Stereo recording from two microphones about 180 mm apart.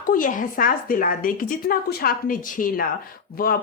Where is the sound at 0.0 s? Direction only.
50° left (ahead or behind).